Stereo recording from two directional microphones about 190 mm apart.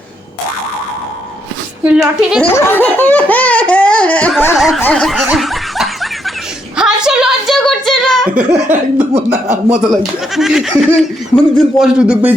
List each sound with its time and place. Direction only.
1.8 s speech: 5° right (ahead or behind)
2.4 s laughter: 10° left (ahead or behind)
4.8 s snicker: 5° left (ahead or behind)
6.7 s a sound: 5° right (ahead or behind)
9.1 s speech: 35° right (ahead or behind)
9.9 s speech: centre (ahead or behind)